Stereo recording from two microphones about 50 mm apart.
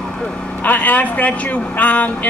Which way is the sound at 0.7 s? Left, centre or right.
Left.